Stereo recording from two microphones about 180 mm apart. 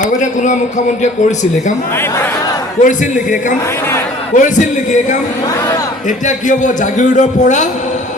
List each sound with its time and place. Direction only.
0.0 s a man's voice: 45° left (ahead or behind)
2.8 s a man's voice: 45° left (ahead or behind)